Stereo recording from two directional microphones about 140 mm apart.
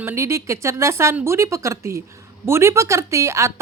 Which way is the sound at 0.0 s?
20° right (ahead or behind).